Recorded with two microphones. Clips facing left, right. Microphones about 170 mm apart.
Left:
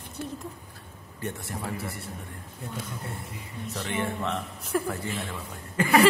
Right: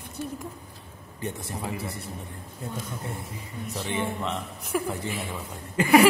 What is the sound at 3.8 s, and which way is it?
Speech, 15° right (ahead or behind).